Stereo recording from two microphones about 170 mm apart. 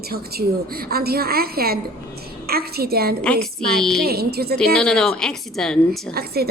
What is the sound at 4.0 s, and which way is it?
Speech, 65° right (ahead or behind).